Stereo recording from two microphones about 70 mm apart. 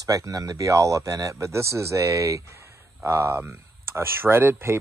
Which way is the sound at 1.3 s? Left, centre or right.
Right.